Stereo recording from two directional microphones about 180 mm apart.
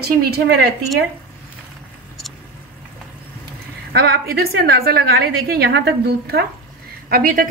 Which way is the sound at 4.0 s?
60° right (ahead or behind).